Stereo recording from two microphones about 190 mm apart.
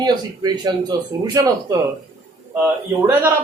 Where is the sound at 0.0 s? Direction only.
20° right (ahead or behind).